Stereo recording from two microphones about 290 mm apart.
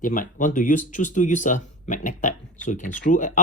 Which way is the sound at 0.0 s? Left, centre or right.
Left.